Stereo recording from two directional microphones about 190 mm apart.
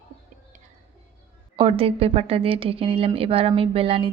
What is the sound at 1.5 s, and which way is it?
A woman's voice, 30° right (ahead or behind).